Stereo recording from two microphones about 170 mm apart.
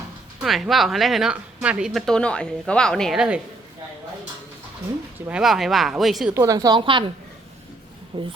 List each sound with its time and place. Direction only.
0.4 s speech: centre (ahead or behind)
5.3 s speech: centre (ahead or behind)
6.3 s a woman's voice: 20° right (ahead or behind)
8.1 s a woman's voice: 20° right (ahead or behind)